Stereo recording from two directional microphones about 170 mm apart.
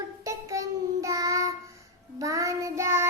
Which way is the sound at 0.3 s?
20° right (ahead or behind).